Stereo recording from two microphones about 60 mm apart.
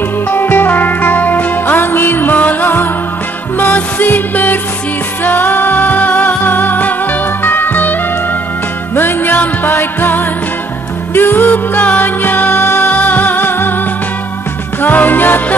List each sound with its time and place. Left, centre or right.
0.3 s music: left
14.8 s music: left